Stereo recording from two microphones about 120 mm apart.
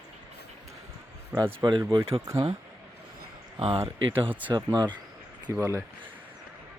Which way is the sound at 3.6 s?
55° right (ahead or behind).